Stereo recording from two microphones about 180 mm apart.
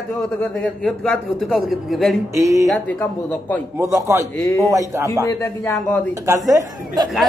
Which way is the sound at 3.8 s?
15° right (ahead or behind).